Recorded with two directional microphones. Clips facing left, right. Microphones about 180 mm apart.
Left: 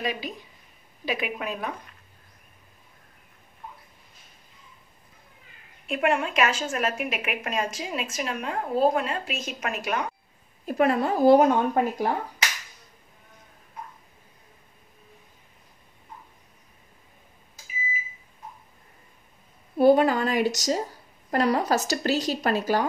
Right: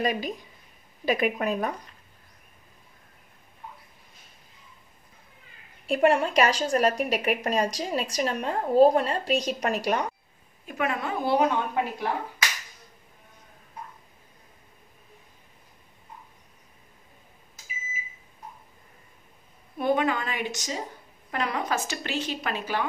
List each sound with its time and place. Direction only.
0.0 s speech: 45° right (ahead or behind)
5.9 s a woman's voice: 35° right (ahead or behind)
10.6 s a woman's voice: 35° left (ahead or behind)
19.8 s a woman's voice: 35° left (ahead or behind)